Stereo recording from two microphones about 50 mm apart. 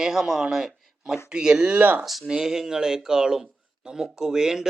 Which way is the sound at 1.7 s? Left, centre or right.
Right.